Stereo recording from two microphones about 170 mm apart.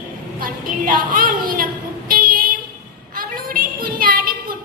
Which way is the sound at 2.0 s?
55° right (ahead or behind).